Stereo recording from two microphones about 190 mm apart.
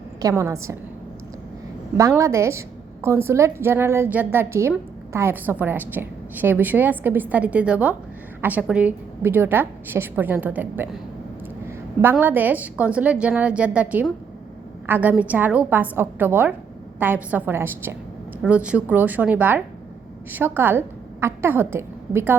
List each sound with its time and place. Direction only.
0.2 s a woman's voice: 15° right (ahead or behind)
2.0 s a woman's voice: 15° right (ahead or behind)
12.1 s a woman's voice: 10° right (ahead or behind)